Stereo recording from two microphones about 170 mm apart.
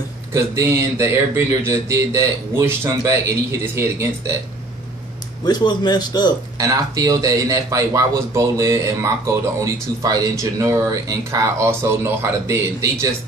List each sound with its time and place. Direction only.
0.3 s speech: 15° right (ahead or behind)
5.4 s a man's voice: 25° left (ahead or behind)
6.6 s speech: 20° right (ahead or behind)